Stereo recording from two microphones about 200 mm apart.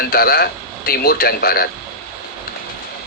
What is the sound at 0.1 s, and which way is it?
A man's voice, 50° left (ahead or behind).